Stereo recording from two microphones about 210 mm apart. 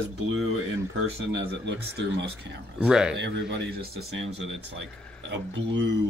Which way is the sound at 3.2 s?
55° right (ahead or behind).